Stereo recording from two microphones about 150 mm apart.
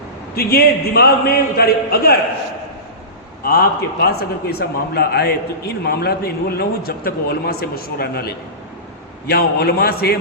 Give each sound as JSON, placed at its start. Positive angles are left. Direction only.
{"t": 0.3, "sound": "a man's voice", "side_deg": 90}
{"t": 3.4, "sound": "a man's voice", "side_deg": 90}